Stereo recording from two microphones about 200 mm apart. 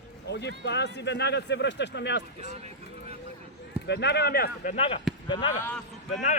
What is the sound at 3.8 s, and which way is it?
Speech, 55° left (ahead or behind).